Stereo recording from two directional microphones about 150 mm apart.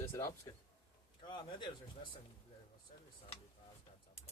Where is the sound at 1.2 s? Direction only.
30° left (ahead or behind).